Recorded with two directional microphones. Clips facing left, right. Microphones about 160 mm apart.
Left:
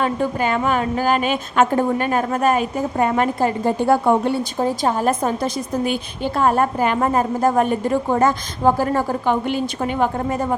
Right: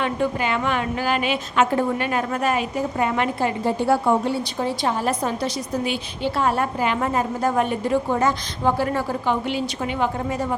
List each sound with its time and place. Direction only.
0.0 s a woman's voice: 40° left (ahead or behind)